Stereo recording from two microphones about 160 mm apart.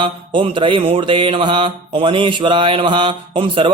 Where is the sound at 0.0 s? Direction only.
30° right (ahead or behind).